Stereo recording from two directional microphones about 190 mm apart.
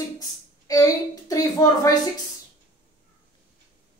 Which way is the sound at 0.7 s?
20° left (ahead or behind).